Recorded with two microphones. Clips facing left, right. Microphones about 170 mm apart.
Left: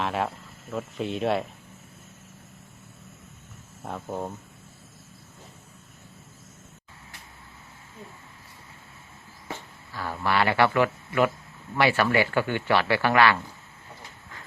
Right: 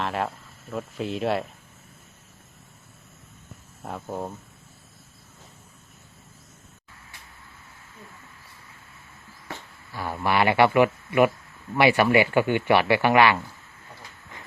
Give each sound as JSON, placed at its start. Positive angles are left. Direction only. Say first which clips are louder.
{"t": 0.0, "sound": "speech", "louder": "even", "side_deg": 0}
{"t": 3.8, "sound": "speech", "louder": "even", "side_deg": 0}
{"t": 9.9, "sound": "speech", "louder": "right 2 dB", "side_deg": -15}